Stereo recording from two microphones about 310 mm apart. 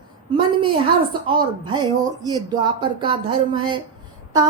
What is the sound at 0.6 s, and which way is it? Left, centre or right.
Female singing, centre.